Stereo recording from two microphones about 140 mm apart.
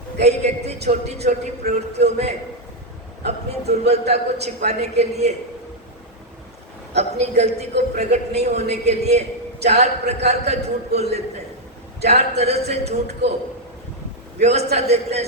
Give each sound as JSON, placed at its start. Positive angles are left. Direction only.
{"t": 0.2, "sound": "a man's voice", "side_deg": -50}
{"t": 6.9, "sound": "a man's voice", "side_deg": -50}
{"t": 14.3, "sound": "a man's voice", "side_deg": -50}